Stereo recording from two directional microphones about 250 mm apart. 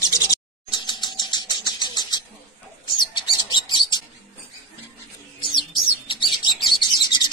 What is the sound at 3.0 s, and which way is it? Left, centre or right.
Bird, centre.